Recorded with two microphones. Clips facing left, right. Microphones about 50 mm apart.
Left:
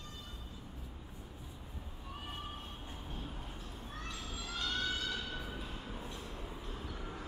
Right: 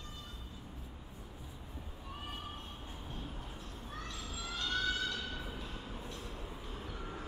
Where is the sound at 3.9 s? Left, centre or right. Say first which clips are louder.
Even; centre.